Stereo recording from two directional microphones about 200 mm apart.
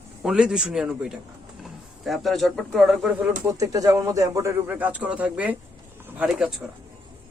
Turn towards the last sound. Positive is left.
turn(degrees=-5)  # may be behind; listen again after turning